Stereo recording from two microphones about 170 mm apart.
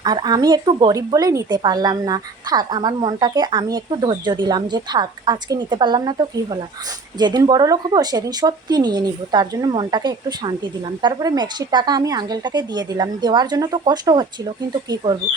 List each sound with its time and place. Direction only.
0.0 s speech: 25° right (ahead or behind)